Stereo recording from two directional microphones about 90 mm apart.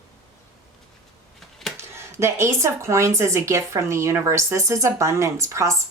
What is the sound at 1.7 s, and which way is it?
Speech, 30° right (ahead or behind).